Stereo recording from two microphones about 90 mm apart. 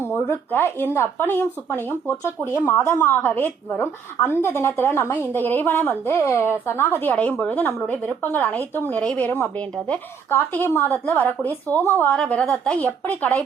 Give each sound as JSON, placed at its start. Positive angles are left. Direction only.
{"t": 0.1, "sound": "a woman's voice", "side_deg": 25}